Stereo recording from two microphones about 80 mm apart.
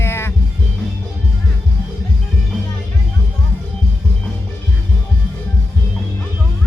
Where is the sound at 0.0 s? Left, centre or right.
Left.